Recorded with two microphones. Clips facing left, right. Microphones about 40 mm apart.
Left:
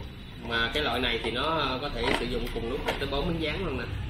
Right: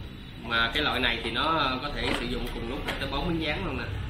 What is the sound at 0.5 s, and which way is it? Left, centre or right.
Speech, right.